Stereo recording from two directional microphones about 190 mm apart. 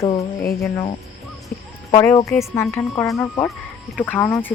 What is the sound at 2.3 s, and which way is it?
Speech, 10° left (ahead or behind).